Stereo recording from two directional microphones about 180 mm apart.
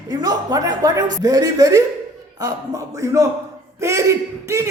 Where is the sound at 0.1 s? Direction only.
20° right (ahead or behind).